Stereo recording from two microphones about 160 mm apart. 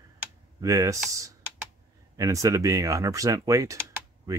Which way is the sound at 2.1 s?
20° right (ahead or behind).